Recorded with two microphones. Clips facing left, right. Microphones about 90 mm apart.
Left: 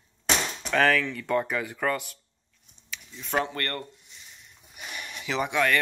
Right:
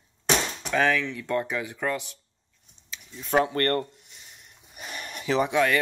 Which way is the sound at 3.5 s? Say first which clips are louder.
Right 8 dB; 40° right (ahead or behind).